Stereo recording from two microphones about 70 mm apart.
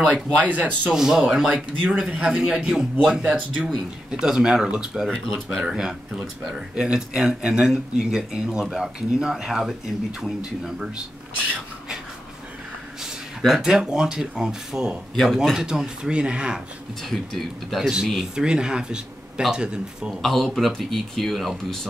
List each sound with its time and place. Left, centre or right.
0.0 s speech: right
0.9 s speech: centre
13.0 s speech: centre
17.1 s speech: centre
20.2 s speech: centre